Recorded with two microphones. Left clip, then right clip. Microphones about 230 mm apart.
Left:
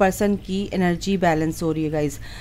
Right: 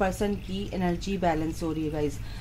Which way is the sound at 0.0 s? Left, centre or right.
Left.